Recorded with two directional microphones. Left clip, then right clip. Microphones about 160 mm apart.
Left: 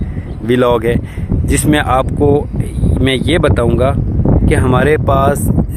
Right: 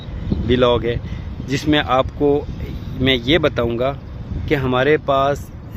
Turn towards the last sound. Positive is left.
turn(degrees=35)  # may be behind; listen again after turning